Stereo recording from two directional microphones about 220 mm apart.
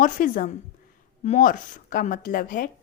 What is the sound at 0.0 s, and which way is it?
A woman's voice, 35° left (ahead or behind).